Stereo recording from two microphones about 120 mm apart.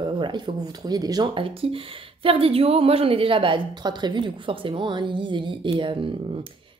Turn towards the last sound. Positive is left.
turn(degrees=-45)  # may be behind; listen again after turning